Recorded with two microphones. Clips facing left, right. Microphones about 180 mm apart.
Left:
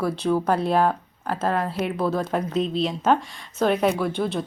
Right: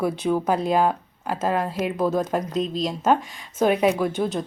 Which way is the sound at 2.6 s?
40° right (ahead or behind).